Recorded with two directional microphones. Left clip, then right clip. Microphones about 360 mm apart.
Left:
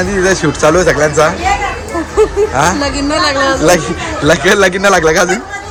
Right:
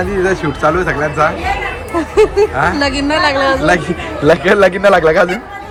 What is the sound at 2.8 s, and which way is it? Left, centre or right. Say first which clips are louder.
Speech: even; right.